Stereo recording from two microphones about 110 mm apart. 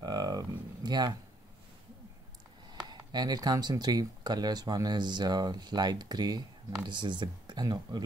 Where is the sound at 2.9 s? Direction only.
40° right (ahead or behind).